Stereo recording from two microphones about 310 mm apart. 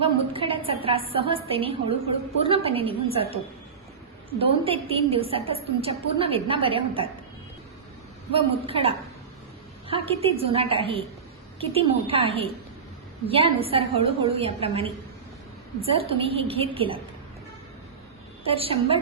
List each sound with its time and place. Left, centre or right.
0.0 s a woman's voice: centre
8.3 s a woman's voice: centre
18.4 s a woman's voice: centre